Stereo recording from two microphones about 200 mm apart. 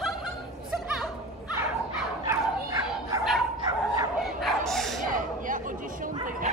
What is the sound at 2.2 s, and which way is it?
Bow-wow, 15° right (ahead or behind).